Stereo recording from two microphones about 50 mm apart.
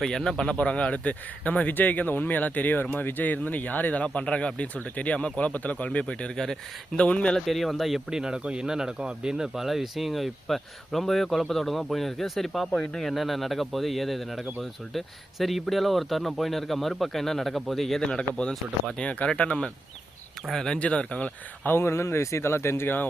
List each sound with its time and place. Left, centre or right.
0.0 s speech: centre; by 4.0 s left
4.0 s speech: left
6.3 s speech: centre
7.4 s speech: centre
18.2 s speech: centre
20.5 s speech: centre
20.7 s speech: left
21.8 s speech: left